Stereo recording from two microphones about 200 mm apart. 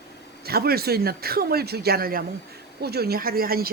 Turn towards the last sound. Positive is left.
turn(degrees=-50)  # may be behind; listen again after turning